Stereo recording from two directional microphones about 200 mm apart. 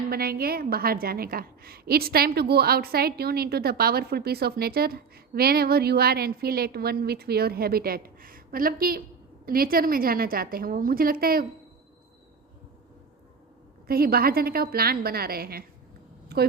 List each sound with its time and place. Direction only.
0.1 s a woman's voice: 50° right (ahead or behind)
13.8 s a woman's voice: 50° right (ahead or behind)